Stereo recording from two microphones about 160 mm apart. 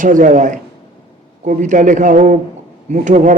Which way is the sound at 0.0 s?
55° right (ahead or behind).